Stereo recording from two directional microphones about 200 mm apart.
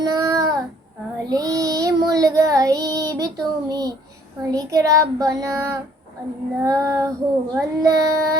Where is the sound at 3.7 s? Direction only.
20° right (ahead or behind).